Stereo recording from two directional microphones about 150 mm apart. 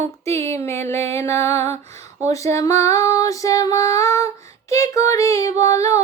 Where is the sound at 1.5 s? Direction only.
45° right (ahead or behind).